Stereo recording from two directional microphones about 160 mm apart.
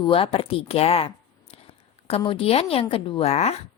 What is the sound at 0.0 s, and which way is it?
A woman's voice, 35° left (ahead or behind).